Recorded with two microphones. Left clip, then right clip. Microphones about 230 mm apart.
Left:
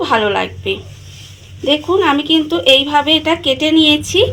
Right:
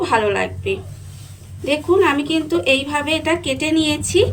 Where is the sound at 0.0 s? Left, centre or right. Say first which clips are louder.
Left 3 dB; left.